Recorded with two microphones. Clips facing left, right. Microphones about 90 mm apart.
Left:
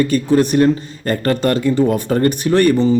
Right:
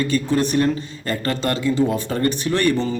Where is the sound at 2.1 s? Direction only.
40° left (ahead or behind).